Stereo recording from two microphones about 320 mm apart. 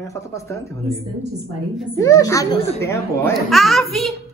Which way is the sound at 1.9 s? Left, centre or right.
Centre.